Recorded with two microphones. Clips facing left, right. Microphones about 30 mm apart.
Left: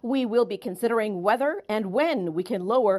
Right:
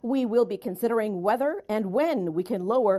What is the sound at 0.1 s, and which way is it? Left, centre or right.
A woman's voice, left.